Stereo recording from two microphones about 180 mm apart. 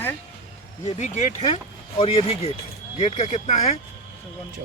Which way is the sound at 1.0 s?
40° left (ahead or behind).